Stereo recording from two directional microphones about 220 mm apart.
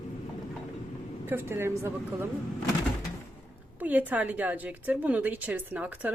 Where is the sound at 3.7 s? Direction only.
5° right (ahead or behind).